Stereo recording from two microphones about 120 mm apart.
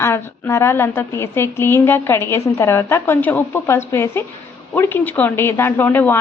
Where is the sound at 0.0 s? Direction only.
25° left (ahead or behind).